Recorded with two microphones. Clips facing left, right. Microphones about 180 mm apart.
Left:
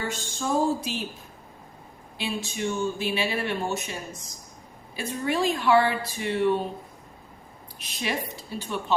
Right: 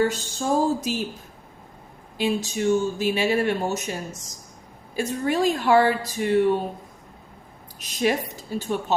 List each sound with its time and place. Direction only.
0.1 s a sound: 40° right (ahead or behind)
2.1 s speech: 45° right (ahead or behind)
7.8 s speech: 45° right (ahead or behind)